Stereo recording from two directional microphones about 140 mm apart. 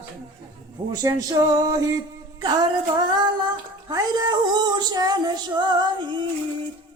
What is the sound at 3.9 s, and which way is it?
Female singing, 30° right (ahead or behind).